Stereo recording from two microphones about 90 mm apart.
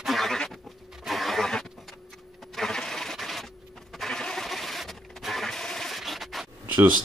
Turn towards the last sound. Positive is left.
turn(degrees=-15)  # may be behind; listen again after turning